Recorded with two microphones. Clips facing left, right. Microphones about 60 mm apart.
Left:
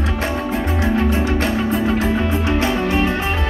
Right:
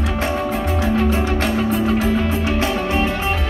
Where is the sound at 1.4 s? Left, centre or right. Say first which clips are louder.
Even; left.